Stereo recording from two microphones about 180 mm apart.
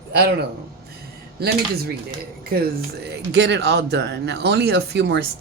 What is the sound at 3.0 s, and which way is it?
Speech, 70° right (ahead or behind).